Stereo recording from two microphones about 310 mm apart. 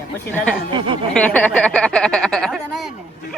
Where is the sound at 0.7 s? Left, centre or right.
Centre.